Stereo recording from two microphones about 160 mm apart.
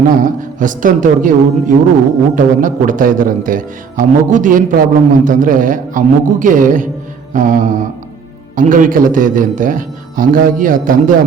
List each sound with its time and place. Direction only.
0.1 s a man's voice: 55° right (ahead or behind)
7.3 s mantra: 55° right (ahead or behind)
8.5 s a man's voice: 55° right (ahead or behind)